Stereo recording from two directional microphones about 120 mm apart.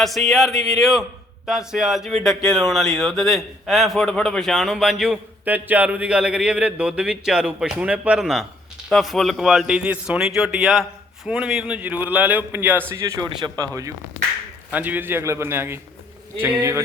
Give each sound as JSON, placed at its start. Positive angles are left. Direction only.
{"t": 0.0, "sound": "a man's voice", "side_deg": 0}
{"t": 12.9, "sound": "a man's voice", "side_deg": -25}
{"t": 14.7, "sound": "a man's voice", "side_deg": -15}